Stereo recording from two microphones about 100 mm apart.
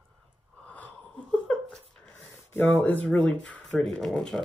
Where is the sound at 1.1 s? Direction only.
10° left (ahead or behind).